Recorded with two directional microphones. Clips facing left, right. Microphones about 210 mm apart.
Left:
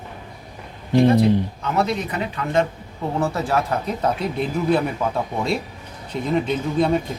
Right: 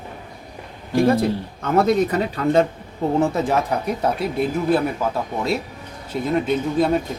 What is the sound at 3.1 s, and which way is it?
Speech, 20° right (ahead or behind).